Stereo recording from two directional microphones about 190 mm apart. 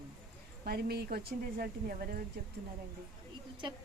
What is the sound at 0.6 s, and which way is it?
Speech, 55° right (ahead or behind).